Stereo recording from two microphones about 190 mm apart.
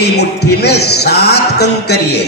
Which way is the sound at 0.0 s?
60° left (ahead or behind).